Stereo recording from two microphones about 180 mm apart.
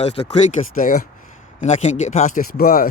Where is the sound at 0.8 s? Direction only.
45° left (ahead or behind).